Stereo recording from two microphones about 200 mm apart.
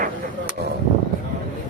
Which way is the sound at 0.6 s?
55° right (ahead or behind).